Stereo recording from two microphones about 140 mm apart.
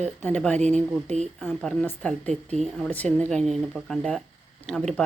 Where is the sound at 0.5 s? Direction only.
55° right (ahead or behind).